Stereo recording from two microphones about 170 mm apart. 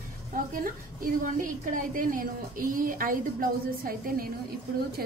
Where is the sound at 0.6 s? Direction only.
50° right (ahead or behind).